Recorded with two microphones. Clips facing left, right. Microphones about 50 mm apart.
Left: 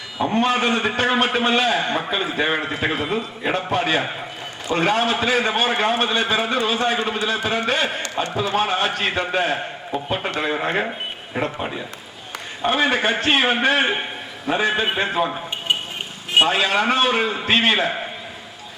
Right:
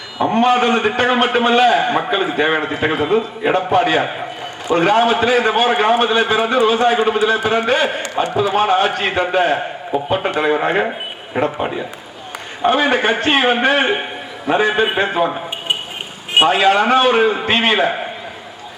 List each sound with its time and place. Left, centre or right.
0.3 s a man's voice: centre
9.0 s a man's voice: right
9.2 s a man's voice: centre